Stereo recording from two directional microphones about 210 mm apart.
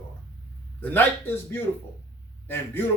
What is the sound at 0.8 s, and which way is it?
Speech, 10° left (ahead or behind).